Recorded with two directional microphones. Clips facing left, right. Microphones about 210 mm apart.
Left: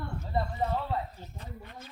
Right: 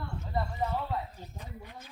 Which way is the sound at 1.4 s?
10° right (ahead or behind).